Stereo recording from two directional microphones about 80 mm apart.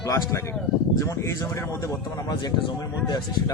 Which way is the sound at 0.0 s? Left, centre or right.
Left.